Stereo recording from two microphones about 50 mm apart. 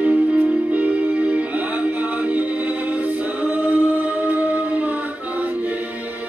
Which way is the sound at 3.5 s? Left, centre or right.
Right.